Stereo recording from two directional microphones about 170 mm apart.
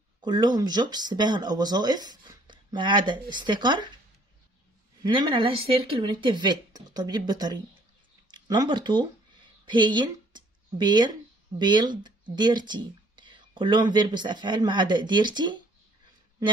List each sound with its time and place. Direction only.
0.2 s speech: 25° right (ahead or behind)
5.0 s speech: 30° right (ahead or behind)